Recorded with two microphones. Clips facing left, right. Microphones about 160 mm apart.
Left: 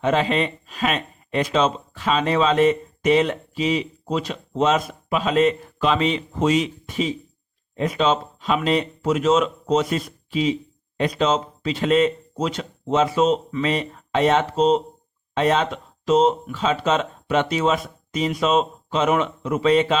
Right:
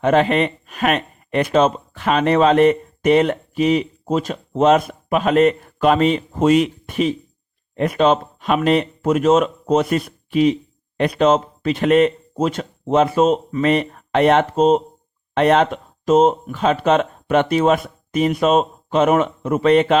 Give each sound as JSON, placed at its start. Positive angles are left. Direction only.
{"t": 0.0, "sound": "speech", "side_deg": -55}
{"t": 15.4, "sound": "speech", "side_deg": -60}